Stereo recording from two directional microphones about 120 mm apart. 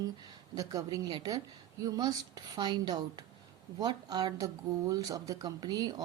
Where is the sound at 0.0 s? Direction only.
35° right (ahead or behind).